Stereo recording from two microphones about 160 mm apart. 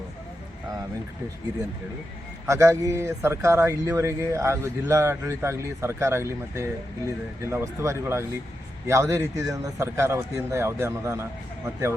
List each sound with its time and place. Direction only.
2.5 s speech: 20° right (ahead or behind)